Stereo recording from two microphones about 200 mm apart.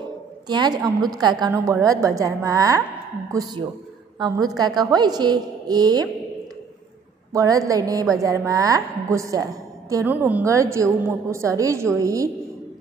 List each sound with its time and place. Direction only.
0.5 s a woman's voice: 20° right (ahead or behind)
7.3 s a woman's voice: 15° right (ahead or behind)